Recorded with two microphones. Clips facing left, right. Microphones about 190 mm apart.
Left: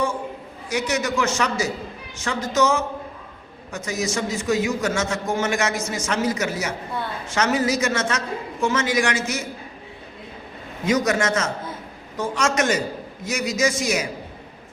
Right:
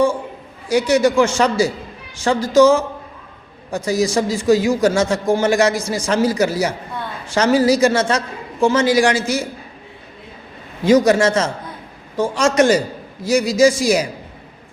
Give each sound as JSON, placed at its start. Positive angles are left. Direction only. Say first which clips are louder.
{"t": 0.7, "sound": "a man's voice", "louder": "right 9 dB", "side_deg": -30}
{"t": 10.8, "sound": "a man's voice", "louder": "right 8 dB", "side_deg": -30}